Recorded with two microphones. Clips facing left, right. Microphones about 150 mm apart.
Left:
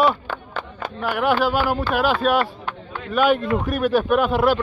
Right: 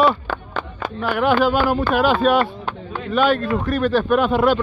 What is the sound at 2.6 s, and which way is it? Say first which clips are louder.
Chop: right 3 dB; 30° right (ahead or behind).